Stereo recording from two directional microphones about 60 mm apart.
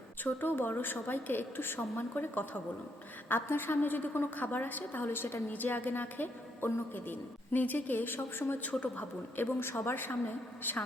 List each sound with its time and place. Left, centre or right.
0.3 s a woman's voice: left